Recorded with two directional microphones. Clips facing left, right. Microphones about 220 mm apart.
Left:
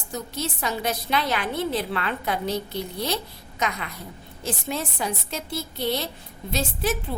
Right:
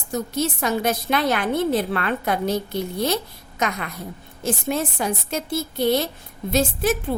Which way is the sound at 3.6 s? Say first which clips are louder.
Right 3 dB; 50° right (ahead or behind).